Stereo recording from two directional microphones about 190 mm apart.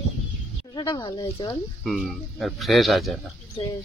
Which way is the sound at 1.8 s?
Centre (ahead or behind).